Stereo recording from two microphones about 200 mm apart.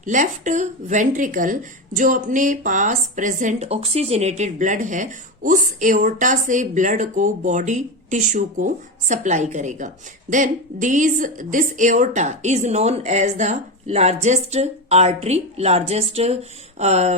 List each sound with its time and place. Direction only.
0.0 s speech: 40° right (ahead or behind)